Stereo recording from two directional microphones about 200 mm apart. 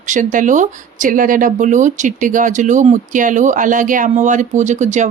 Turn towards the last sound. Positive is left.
turn(degrees=-35)  # may be behind; listen again after turning